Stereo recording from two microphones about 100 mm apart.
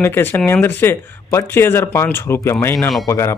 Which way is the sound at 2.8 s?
Centre (ahead or behind).